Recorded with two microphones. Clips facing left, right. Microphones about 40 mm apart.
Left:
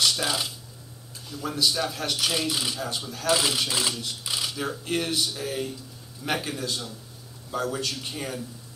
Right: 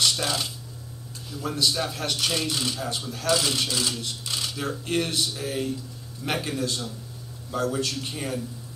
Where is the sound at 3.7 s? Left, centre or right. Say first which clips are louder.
Even; left.